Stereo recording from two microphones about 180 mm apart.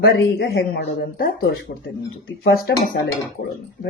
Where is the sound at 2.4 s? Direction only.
60° left (ahead or behind).